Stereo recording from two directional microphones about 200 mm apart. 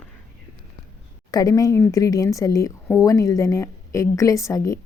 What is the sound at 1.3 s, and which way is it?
Speech, 20° left (ahead or behind).